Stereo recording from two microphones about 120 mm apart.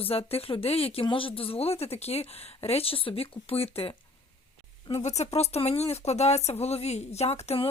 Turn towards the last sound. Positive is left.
turn(degrees=60)  # may be behind; listen again after turning